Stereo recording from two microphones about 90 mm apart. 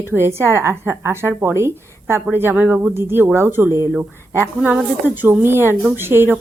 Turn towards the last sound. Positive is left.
turn(degrees=-25)  # may be behind; listen again after turning